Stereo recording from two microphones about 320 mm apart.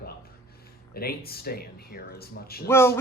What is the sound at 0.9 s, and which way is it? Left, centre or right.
Speech, left.